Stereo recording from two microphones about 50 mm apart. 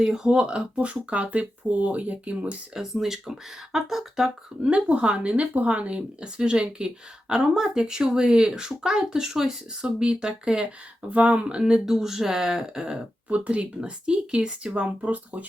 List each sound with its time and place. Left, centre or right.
0.0 s speech: centre
0.3 s speech: centre
2.7 s speech: centre
4.6 s speech: right
11.1 s speech: right
11.6 s speech: centre
13.2 s speech: right